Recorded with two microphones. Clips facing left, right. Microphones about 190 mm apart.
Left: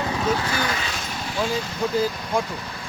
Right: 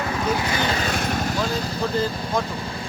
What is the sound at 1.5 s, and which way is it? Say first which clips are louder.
Speech: right 1 dB; 35° right (ahead or behind).